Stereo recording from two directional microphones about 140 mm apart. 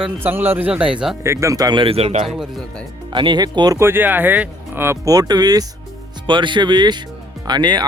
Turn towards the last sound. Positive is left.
turn(degrees=-30)  # may be behind; listen again after turning